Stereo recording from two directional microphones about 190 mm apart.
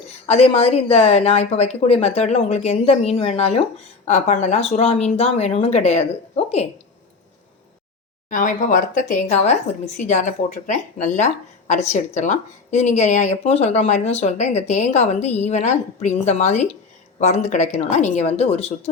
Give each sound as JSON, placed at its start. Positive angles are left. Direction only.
{"t": 0.1, "sound": "speech", "side_deg": 35}
{"t": 8.3, "sound": "speech", "side_deg": 45}